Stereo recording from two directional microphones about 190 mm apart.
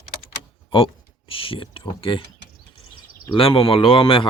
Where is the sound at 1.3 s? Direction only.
30° left (ahead or behind).